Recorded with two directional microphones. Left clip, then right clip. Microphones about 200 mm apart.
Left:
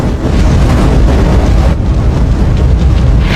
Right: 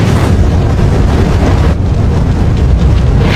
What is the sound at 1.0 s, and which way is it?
Vehicle, centre (ahead or behind).